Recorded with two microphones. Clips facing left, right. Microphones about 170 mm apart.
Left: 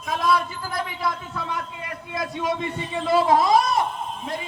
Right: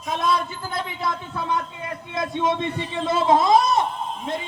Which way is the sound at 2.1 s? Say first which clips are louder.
Right 3 dB; 25° right (ahead or behind).